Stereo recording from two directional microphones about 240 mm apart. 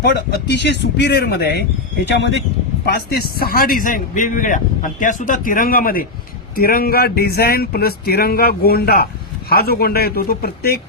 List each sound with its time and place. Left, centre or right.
0.0 s speech: left
2.8 s a man's voice: left